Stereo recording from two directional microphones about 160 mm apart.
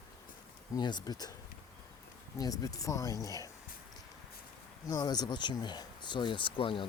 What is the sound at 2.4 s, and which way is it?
Speech, 25° left (ahead or behind).